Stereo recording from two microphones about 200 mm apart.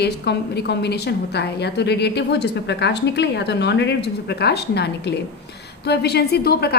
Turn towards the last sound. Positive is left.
turn(degrees=50)  # may be behind; listen again after turning